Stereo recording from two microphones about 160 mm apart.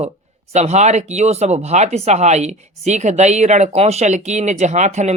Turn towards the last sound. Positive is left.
turn(degrees=-45)  # may be behind; listen again after turning